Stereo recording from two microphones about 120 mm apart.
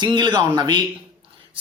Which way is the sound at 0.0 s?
40° right (ahead or behind).